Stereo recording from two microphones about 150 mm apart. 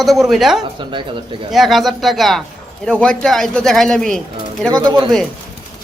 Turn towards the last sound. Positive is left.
turn(degrees=-30)  # may be behind; listen again after turning